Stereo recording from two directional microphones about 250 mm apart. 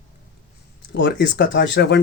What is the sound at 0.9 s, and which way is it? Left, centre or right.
Speech, left.